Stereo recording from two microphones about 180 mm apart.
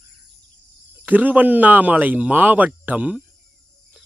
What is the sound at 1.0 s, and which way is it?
Speech, 10° right (ahead or behind).